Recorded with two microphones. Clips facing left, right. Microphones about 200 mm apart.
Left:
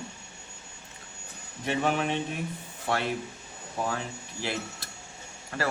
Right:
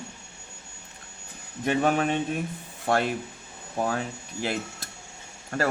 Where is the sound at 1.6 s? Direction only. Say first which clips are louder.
Right 4 dB; 50° right (ahead or behind).